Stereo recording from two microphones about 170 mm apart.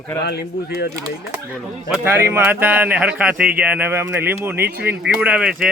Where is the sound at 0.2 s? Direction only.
70° left (ahead or behind).